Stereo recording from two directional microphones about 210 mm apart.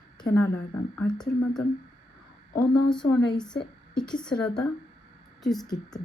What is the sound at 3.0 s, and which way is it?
Speech, 20° left (ahead or behind).